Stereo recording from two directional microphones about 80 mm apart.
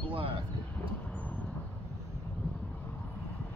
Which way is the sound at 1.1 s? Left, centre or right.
Centre.